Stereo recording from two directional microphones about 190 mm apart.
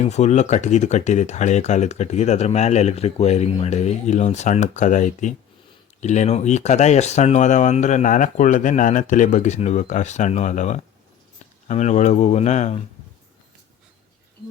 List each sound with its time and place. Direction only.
0.0 s speech: 35° left (ahead or behind)